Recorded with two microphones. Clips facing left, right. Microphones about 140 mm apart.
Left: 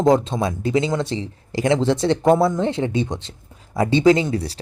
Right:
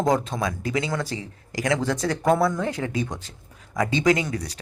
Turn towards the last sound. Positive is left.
turn(degrees=30)  # may be behind; listen again after turning